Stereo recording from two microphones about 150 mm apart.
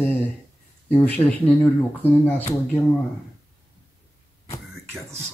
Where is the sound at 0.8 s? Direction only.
10° left (ahead or behind).